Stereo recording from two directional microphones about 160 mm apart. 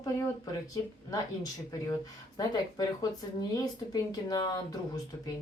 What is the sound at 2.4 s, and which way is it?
Speech, 25° left (ahead or behind).